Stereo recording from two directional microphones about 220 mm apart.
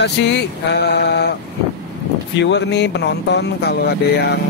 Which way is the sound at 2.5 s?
50° left (ahead or behind).